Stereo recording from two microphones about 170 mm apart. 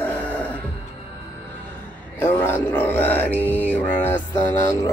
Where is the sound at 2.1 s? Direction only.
15° left (ahead or behind).